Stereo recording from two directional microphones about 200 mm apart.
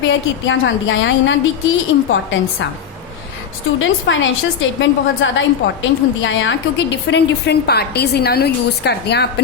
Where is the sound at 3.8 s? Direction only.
70° left (ahead or behind).